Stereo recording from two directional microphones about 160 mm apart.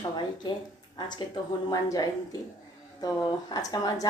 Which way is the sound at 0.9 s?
25° left (ahead or behind).